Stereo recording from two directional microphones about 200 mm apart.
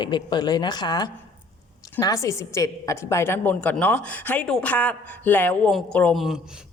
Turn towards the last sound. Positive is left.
turn(degrees=-5)  # may be behind; listen again after turning